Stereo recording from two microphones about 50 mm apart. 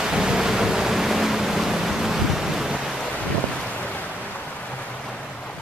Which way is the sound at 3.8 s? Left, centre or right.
Left.